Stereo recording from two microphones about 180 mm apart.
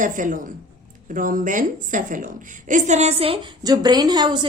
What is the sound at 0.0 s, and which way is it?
A woman's voice, 45° right (ahead or behind).